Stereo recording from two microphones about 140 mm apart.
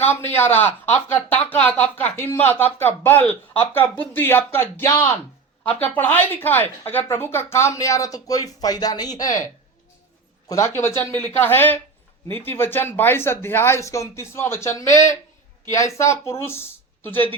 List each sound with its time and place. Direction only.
0.0 s a man's voice: 15° left (ahead or behind)